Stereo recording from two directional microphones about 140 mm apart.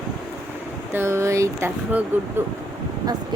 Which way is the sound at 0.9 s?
20° right (ahead or behind).